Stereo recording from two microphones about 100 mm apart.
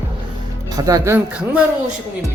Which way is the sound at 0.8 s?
35° right (ahead or behind).